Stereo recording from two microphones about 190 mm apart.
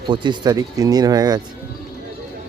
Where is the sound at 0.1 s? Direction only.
25° right (ahead or behind).